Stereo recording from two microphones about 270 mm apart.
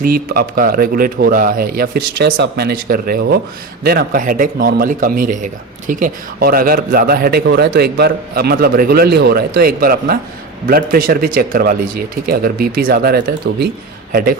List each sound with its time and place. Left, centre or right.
0.0 s a man's voice: right